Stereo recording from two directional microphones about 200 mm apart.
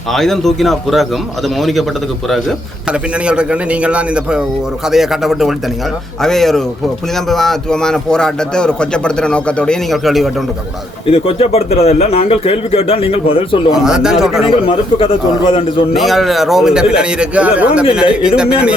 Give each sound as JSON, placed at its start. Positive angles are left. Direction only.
{"t": 0.1, "sound": "a man's voice", "side_deg": 0}
{"t": 11.0, "sound": "speech", "side_deg": 30}
{"t": 13.7, "sound": "a man's voice", "side_deg": -5}
{"t": 14.5, "sound": "speech", "side_deg": 25}
{"t": 16.0, "sound": "a man's voice", "side_deg": 0}